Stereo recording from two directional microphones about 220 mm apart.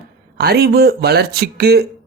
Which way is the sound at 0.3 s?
45° right (ahead or behind).